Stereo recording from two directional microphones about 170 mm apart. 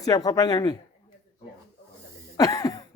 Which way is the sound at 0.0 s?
20° left (ahead or behind).